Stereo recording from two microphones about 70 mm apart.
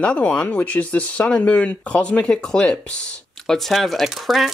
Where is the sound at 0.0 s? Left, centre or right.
Centre.